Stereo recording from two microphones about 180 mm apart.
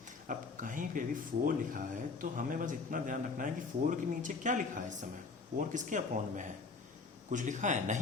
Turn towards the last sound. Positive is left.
turn(degrees=-45)  # may be behind; listen again after turning